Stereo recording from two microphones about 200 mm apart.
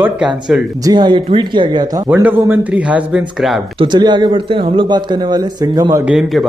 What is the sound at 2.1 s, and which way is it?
Speech, 10° right (ahead or behind).